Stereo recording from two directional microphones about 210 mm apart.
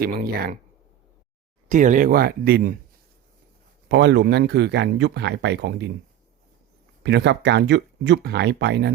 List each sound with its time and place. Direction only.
0.0 s speech: 45° right (ahead or behind)
1.7 s speech: 35° right (ahead or behind)
3.8 s speech: 55° right (ahead or behind)
7.0 s speech: 55° right (ahead or behind)